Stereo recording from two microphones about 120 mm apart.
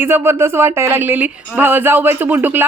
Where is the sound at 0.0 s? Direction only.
20° right (ahead or behind).